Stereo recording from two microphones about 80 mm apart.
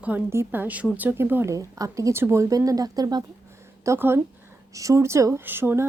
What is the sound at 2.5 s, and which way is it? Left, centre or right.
Speech, right.